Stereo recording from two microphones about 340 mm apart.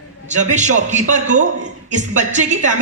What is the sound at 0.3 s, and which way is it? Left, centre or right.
Speech, right.